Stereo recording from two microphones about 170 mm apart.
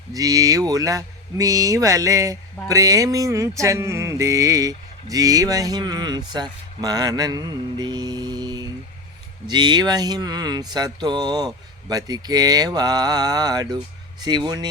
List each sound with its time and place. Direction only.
0.1 s music: 20° right (ahead or behind)